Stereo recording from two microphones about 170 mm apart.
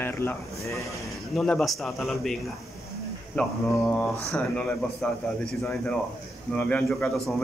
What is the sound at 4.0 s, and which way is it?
Speech, 5° left (ahead or behind).